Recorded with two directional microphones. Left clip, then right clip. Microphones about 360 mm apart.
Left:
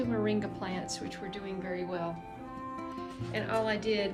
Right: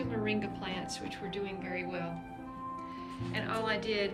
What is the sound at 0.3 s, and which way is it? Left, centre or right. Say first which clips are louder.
Speech: left 2 dB; centre.